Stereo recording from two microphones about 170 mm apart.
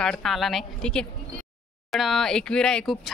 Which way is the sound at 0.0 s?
5° left (ahead or behind).